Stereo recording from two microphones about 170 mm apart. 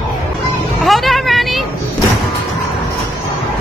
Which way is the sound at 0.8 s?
Centre (ahead or behind).